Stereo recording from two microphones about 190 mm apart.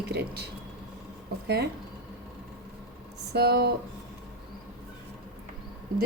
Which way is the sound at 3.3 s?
55° right (ahead or behind).